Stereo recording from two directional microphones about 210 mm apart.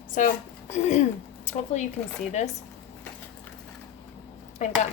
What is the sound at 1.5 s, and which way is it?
Speech, 35° left (ahead or behind).